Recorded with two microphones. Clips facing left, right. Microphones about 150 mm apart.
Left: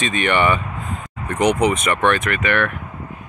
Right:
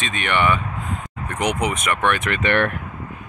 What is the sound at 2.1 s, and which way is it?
Speech, 15° right (ahead or behind).